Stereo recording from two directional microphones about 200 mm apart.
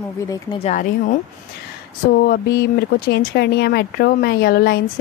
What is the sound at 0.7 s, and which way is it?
Speech, 40° left (ahead or behind).